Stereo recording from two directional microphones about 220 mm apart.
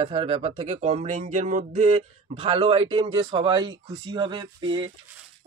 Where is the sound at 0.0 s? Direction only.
25° right (ahead or behind).